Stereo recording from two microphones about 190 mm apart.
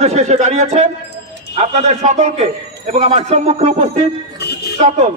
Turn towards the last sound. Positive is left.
turn(degrees=-35)  # may be behind; listen again after turning